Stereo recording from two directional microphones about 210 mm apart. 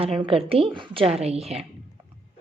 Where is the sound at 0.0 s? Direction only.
25° right (ahead or behind).